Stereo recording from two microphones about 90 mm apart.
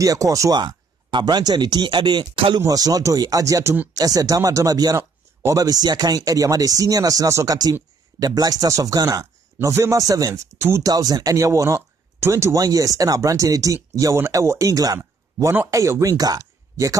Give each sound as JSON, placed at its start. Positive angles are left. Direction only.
{"t": 0.0, "sound": "a man's voice", "side_deg": -40}
{"t": 0.6, "sound": "speech", "side_deg": -55}
{"t": 2.6, "sound": "a man's voice", "side_deg": -40}
{"t": 12.5, "sound": "a man's voice", "side_deg": -40}